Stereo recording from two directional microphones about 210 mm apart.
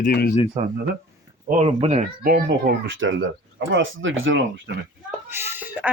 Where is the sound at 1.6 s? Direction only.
30° right (ahead or behind).